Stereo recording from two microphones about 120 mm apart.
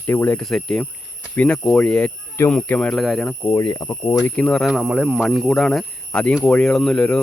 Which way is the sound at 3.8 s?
15° left (ahead or behind).